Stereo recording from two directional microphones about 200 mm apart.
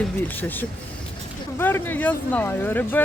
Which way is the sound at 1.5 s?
10° left (ahead or behind).